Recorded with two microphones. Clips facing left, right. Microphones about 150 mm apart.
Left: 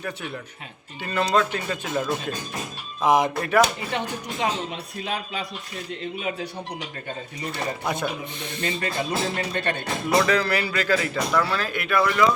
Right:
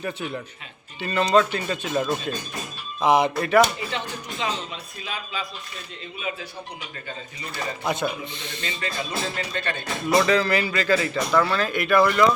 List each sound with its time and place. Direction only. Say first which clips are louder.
1.0 s speech: right 3 dB; centre (ahead or behind)
3.9 s speech: left 3 dB; 55° left (ahead or behind)
7.9 s speech: right 1 dB; 10° left (ahead or behind)
8.6 s speech: left 4 dB; 50° left (ahead or behind)
10.1 s speech: right 2 dB; centre (ahead or behind)